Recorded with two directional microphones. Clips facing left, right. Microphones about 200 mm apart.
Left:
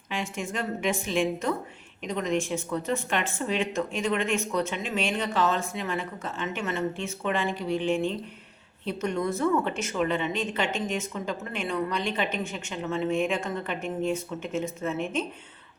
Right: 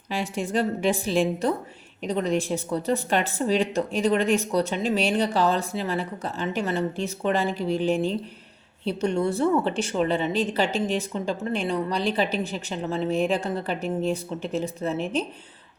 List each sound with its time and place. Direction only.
0.1 s speech: 35° right (ahead or behind)